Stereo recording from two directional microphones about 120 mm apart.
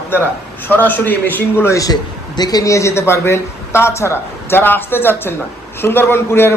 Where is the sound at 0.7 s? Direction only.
15° left (ahead or behind).